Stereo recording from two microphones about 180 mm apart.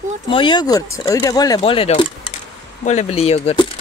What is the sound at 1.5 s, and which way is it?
Speech, 30° left (ahead or behind).